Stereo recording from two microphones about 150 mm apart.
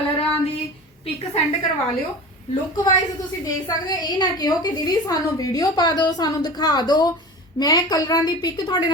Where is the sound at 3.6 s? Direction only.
25° left (ahead or behind).